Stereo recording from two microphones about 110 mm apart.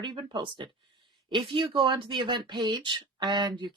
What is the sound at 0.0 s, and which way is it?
Speech, 45° right (ahead or behind).